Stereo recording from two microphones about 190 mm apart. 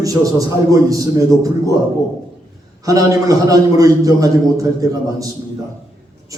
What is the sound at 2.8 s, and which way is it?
A man's voice, 20° right (ahead or behind).